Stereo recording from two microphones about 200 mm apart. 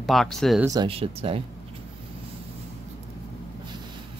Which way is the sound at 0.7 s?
25° right (ahead or behind).